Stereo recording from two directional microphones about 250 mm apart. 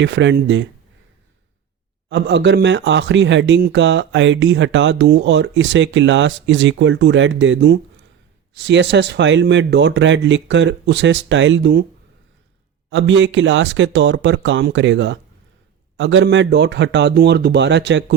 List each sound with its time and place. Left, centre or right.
0.0 s a man's voice: right
2.0 s a man's voice: right
12.9 s a man's voice: right